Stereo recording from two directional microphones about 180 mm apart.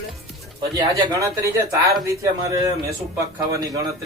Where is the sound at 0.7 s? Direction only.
20° right (ahead or behind).